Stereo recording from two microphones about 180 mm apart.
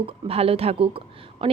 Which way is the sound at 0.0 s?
35° right (ahead or behind).